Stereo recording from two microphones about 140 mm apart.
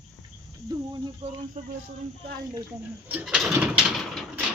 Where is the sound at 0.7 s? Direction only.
30° right (ahead or behind).